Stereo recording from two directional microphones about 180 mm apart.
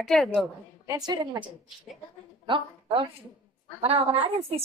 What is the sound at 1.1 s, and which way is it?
A woman's voice, 25° right (ahead or behind).